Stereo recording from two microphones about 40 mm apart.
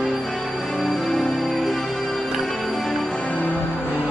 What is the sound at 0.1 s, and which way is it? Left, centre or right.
Music, centre.